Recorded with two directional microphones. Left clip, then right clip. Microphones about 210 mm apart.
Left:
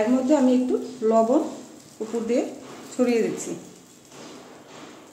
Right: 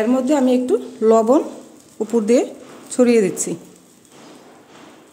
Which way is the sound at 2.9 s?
60° right (ahead or behind).